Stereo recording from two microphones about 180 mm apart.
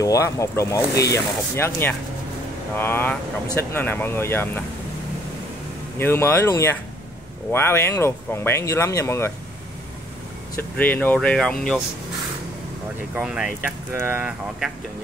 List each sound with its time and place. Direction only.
0.0 s speech: 20° left (ahead or behind)
5.9 s speech: 15° left (ahead or behind)
10.8 s speech: 10° left (ahead or behind)
13.1 s speech: 5° right (ahead or behind)